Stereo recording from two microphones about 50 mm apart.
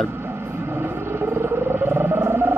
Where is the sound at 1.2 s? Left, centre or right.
Right.